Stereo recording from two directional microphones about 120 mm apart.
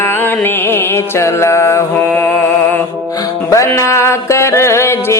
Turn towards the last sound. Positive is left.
turn(degrees=20)  # may be behind; listen again after turning